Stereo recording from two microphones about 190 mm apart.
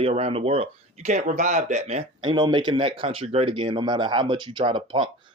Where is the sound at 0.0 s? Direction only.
30° right (ahead or behind).